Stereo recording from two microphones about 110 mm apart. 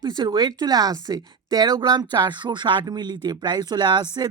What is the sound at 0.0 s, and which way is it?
Speech, 45° right (ahead or behind).